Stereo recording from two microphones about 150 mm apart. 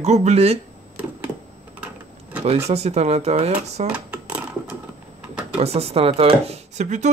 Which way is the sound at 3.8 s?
10° right (ahead or behind).